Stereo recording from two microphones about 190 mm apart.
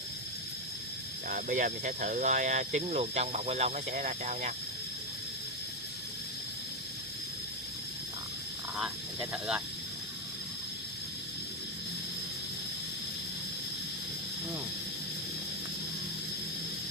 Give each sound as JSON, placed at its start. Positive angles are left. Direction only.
{"t": 1.3, "sound": "speech", "side_deg": -45}